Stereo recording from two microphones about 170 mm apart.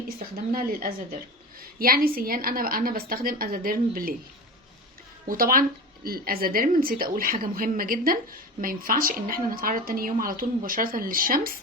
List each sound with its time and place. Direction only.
0.5 s a woman's voice: 55° right (ahead or behind)
5.3 s a woman's voice: 55° right (ahead or behind)